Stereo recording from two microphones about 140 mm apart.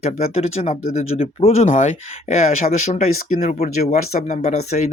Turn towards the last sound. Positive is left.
turn(degrees=55)  # may be behind; listen again after turning